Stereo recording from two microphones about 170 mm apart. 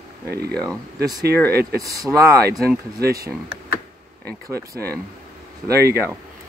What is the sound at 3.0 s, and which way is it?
Speech, 65° right (ahead or behind).